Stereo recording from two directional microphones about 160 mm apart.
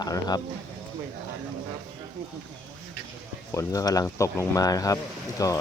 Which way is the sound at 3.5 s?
20° left (ahead or behind).